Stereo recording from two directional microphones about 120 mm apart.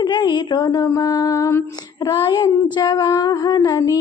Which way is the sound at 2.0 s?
40° left (ahead or behind).